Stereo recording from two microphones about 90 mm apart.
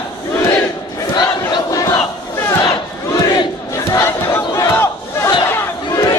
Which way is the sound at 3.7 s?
35° left (ahead or behind).